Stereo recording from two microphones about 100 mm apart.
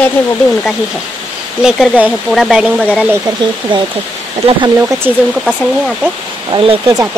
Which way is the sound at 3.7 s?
55° right (ahead or behind).